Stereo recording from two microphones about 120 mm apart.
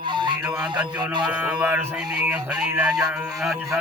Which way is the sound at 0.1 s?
40° right (ahead or behind).